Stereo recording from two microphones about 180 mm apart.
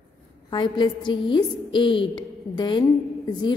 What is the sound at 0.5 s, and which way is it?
A woman's voice, 25° left (ahead or behind).